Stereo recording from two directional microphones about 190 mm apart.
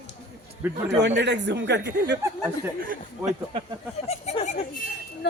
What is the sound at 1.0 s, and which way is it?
Speech, 65° right (ahead or behind).